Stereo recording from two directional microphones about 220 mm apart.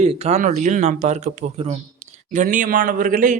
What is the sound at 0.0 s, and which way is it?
Speech, 30° right (ahead or behind).